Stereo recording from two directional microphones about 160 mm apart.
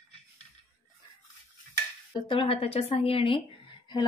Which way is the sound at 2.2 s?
35° left (ahead or behind).